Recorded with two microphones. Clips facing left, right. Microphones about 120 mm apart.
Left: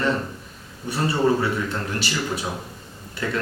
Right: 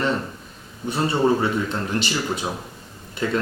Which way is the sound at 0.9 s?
25° right (ahead or behind).